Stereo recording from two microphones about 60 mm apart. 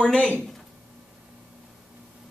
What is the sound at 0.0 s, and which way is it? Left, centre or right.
Speech, centre.